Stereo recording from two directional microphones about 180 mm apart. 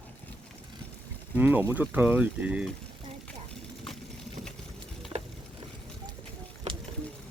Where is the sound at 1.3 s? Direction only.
10° right (ahead or behind).